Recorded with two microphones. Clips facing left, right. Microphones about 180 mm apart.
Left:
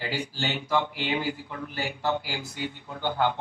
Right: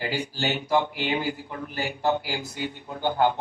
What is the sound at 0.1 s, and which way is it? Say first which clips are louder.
Speech: right 3 dB; 15° right (ahead or behind).